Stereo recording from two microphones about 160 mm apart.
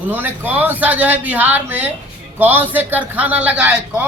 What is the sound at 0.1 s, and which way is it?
A man's voice, 10° right (ahead or behind).